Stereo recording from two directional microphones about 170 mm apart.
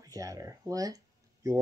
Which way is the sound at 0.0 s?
20° right (ahead or behind).